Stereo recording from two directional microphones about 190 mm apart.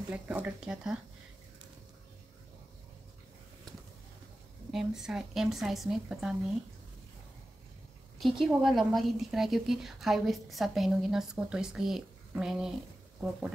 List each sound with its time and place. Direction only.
0.1 s a woman's voice: 5° right (ahead or behind)
4.7 s a woman's voice: 5° right (ahead or behind)
8.2 s a woman's voice: centre (ahead or behind)